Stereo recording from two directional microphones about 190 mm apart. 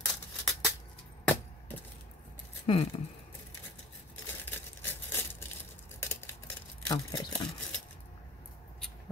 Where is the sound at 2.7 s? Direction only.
30° left (ahead or behind).